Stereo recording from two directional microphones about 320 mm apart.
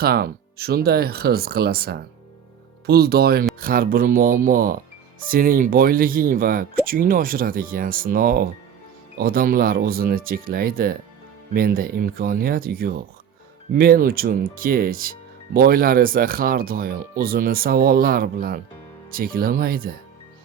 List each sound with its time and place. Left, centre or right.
0.0 s speech: right